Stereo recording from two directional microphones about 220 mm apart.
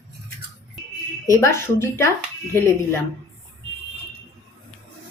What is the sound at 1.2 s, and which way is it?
Speech, 15° left (ahead or behind).